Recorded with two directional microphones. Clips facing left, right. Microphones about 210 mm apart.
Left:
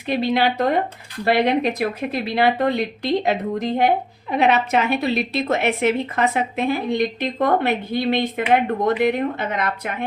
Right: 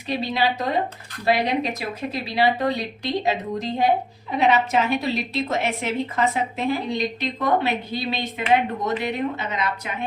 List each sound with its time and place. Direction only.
0.1 s a woman's voice: 55° left (ahead or behind)